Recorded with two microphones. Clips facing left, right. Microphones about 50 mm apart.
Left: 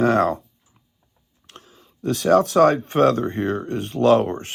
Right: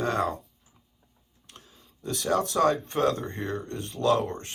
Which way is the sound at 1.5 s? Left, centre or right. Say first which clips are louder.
Left 6 dB; left.